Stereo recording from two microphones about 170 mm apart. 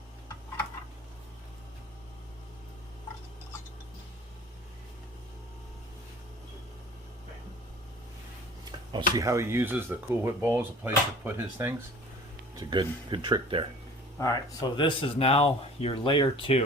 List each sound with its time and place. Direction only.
9.1 s speech: 15° right (ahead or behind)
12.5 s speech: 25° right (ahead or behind)
14.2 s speech: 25° left (ahead or behind)